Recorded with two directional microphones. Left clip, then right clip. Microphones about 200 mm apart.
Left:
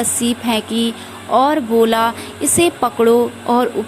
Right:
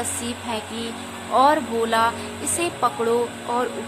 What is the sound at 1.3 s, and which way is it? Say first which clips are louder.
Music: left 4 dB; 30° left (ahead or behind).